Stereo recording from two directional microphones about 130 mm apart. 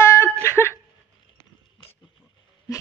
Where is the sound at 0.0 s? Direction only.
20° left (ahead or behind).